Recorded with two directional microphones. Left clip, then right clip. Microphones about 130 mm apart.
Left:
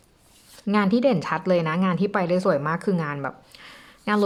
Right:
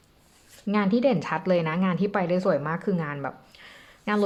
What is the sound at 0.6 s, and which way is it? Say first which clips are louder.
Speech: left 2 dB; 25° left (ahead or behind).